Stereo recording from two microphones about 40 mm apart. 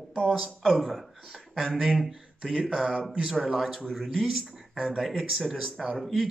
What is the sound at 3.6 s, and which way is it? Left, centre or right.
Speech, centre.